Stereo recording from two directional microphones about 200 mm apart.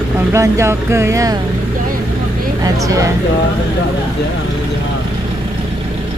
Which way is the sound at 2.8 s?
15° right (ahead or behind).